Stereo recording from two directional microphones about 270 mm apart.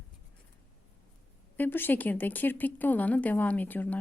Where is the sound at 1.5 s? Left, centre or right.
Centre.